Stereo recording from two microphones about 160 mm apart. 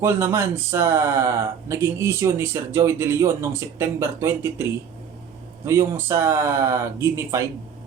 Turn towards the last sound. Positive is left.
turn(degrees=-15)  # may be behind; listen again after turning